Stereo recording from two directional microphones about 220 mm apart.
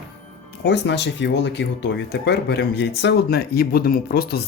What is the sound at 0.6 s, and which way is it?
Speech, 50° left (ahead or behind).